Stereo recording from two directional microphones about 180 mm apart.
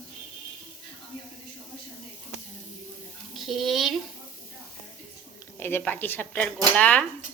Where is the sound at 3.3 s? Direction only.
Centre (ahead or behind).